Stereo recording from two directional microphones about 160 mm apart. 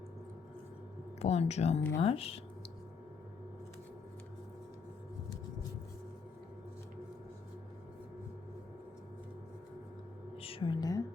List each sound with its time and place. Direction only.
1.2 s speech: 40° left (ahead or behind)
10.3 s music: 35° left (ahead or behind)